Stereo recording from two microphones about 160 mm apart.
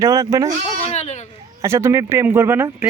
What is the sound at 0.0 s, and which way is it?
Speech, 20° right (ahead or behind).